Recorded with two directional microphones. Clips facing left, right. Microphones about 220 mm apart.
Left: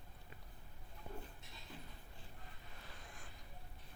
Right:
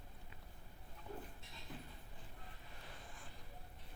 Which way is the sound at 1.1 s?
40° left (ahead or behind).